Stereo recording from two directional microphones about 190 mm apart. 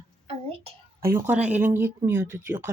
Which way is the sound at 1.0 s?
10° right (ahead or behind).